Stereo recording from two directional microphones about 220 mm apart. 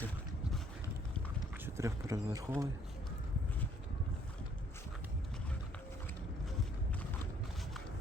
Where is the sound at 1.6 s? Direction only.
10° right (ahead or behind).